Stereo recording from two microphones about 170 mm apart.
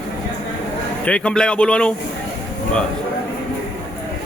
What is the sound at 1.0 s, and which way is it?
Speech, 5° left (ahead or behind).